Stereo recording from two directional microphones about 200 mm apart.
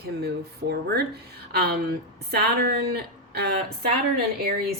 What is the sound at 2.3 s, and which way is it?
Speech, 50° right (ahead or behind).